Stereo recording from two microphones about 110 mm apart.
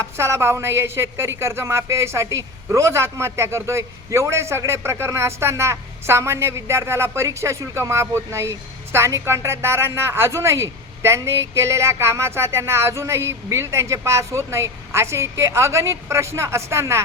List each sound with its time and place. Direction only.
0.0 s speech: 25° right (ahead or behind)